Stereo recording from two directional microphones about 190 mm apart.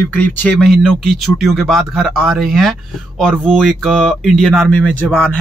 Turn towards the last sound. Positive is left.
turn(degrees=5)  # may be behind; listen again after turning